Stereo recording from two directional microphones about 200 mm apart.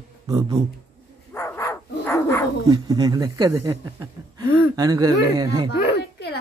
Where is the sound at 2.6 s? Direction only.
20° right (ahead or behind).